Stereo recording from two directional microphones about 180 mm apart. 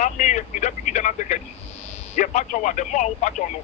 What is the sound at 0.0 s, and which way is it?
Telephone, 45° left (ahead or behind).